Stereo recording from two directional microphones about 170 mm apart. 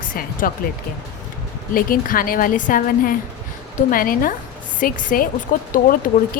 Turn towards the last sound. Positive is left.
turn(degrees=55)  # may be behind; listen again after turning